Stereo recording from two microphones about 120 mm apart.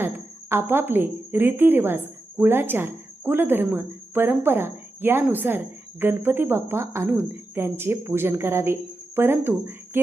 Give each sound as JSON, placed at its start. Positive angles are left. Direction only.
{"t": 0.5, "sound": "a woman's voice", "side_deg": -20}